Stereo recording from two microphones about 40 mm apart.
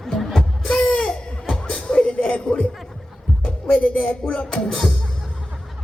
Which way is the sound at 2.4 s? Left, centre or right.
Left.